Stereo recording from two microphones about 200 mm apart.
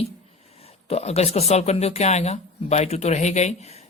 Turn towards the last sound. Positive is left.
turn(degrees=35)  # may be behind; listen again after turning